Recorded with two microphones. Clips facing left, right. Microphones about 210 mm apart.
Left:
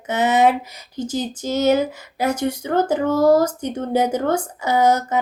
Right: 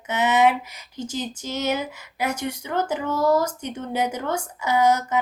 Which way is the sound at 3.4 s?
35° left (ahead or behind).